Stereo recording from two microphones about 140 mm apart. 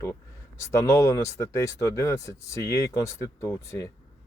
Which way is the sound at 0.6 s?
20° left (ahead or behind).